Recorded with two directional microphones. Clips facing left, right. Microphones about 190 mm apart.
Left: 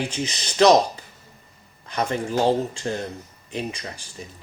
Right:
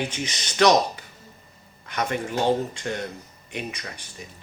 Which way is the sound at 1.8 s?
30° left (ahead or behind).